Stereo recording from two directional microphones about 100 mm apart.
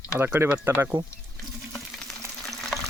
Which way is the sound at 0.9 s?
55° right (ahead or behind).